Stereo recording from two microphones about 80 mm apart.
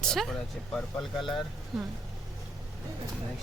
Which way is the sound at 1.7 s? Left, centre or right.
Centre.